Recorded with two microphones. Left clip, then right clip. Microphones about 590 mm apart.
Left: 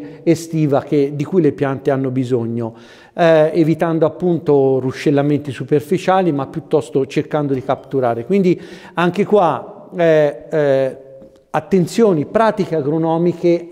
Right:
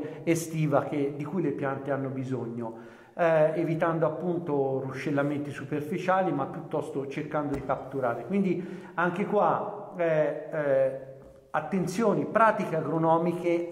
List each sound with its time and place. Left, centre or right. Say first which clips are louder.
0.2 s speech: left 13 dB; left
11.5 s a man's voice: left 13 dB; left